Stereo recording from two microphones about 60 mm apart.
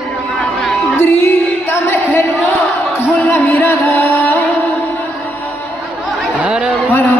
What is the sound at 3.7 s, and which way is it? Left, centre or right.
Music, left.